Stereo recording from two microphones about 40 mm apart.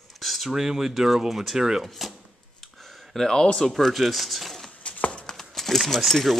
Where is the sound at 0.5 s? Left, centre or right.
Centre.